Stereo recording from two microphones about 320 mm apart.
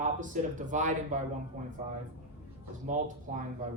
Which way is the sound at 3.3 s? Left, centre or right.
Right.